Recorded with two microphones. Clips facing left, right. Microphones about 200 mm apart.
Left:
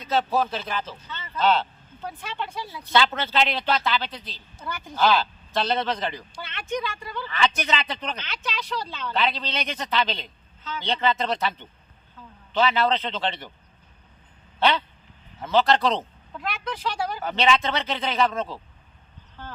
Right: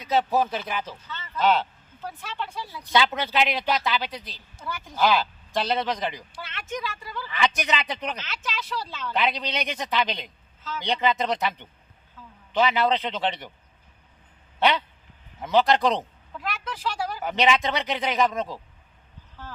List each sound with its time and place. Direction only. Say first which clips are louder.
0.0 s speech: right 1 dB; 15° right (ahead or behind)
2.2 s speech: left 1 dB; centre (ahead or behind)
2.9 s speech: even; 15° right (ahead or behind)
5.0 s speech: left 1 dB; 15° right (ahead or behind)
6.4 s speech: left 3 dB; centre (ahead or behind)
7.3 s speech: even; 15° right (ahead or behind)
8.1 s speech: left 1 dB; 5° right (ahead or behind)
9.1 s speech: even; 15° right (ahead or behind)
14.6 s speech: even; 15° right (ahead or behind)
16.4 s speech: left 2 dB; 5° right (ahead or behind)
17.2 s speech: even; 15° right (ahead or behind)